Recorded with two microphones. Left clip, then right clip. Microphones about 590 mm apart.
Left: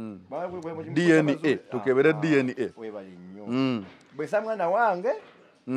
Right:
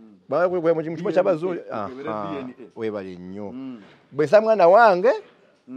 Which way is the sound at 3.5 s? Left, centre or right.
Left.